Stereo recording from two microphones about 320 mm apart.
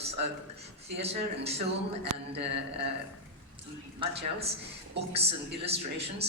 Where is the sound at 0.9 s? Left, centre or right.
Centre.